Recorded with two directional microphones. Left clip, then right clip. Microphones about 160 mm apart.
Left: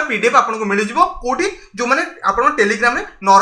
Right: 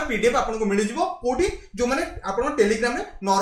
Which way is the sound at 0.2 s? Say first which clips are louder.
Left 8 dB; 35° right (ahead or behind).